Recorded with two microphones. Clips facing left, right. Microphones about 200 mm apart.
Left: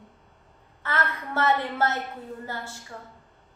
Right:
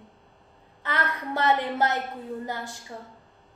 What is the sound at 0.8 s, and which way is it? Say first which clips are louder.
A woman's voice: even; 15° right (ahead or behind).